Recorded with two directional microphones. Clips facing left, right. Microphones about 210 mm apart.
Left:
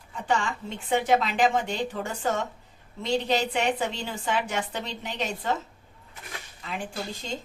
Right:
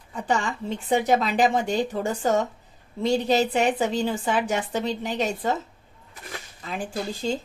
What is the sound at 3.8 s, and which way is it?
Speech, 35° right (ahead or behind).